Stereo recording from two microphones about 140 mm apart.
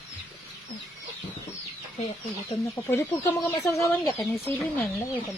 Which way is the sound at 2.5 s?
15° left (ahead or behind).